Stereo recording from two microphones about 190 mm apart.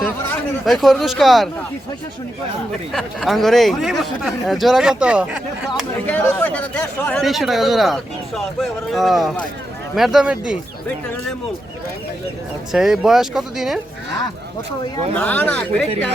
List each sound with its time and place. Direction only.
0.6 s speech: centre (ahead or behind)
2.9 s speech: centre (ahead or behind)
6.1 s speech: 10° left (ahead or behind)
12.7 s speech: centre (ahead or behind)
15.1 s speech: 10° left (ahead or behind)